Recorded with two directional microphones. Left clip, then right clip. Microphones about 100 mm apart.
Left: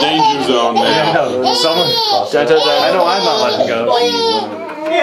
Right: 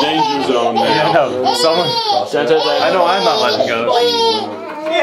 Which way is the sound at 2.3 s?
15° left (ahead or behind).